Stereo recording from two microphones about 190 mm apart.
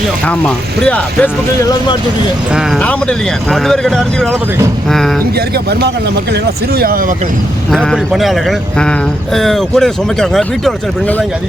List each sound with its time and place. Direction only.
0.3 s speech: 5° left (ahead or behind)
2.7 s speech: 5° left (ahead or behind)
6.3 s speech: 50° right (ahead or behind)
7.7 s speech: centre (ahead or behind)